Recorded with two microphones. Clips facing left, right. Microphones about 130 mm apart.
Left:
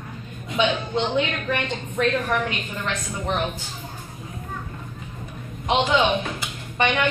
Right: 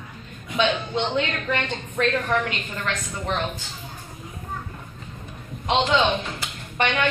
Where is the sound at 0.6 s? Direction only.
15° left (ahead or behind).